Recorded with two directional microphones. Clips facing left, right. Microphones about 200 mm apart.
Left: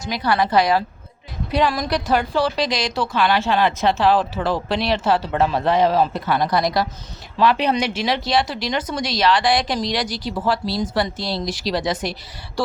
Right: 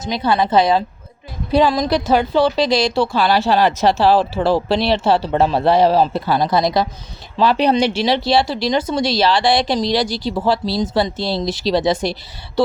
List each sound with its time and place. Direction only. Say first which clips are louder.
0.0 s a woman's voice: right 3 dB; 25° right (ahead or behind)